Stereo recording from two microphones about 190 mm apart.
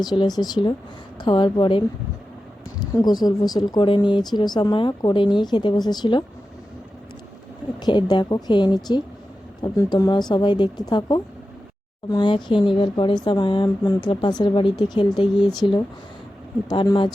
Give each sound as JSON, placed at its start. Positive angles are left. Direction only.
{"t": 0.0, "sound": "speech", "side_deg": 20}
{"t": 2.8, "sound": "speech", "side_deg": 20}
{"t": 7.8, "sound": "speech", "side_deg": 20}